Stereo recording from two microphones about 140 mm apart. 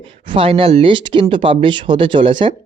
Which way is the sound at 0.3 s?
40° right (ahead or behind).